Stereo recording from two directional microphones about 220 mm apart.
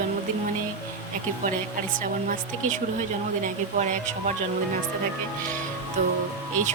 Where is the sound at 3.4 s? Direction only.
35° right (ahead or behind).